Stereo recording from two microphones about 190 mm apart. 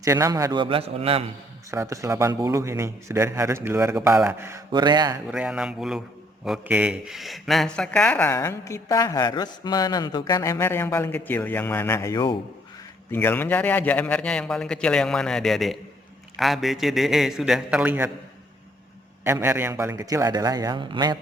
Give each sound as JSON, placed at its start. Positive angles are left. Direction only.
{"t": 0.0, "sound": "a man's voice", "side_deg": -15}
{"t": 1.7, "sound": "a man's voice", "side_deg": -15}
{"t": 5.3, "sound": "a man's voice", "side_deg": -5}
{"t": 13.1, "sound": "a man's voice", "side_deg": 10}
{"t": 19.2, "sound": "a man's voice", "side_deg": -10}